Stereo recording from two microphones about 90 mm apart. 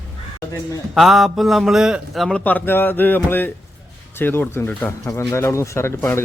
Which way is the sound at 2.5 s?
20° left (ahead or behind).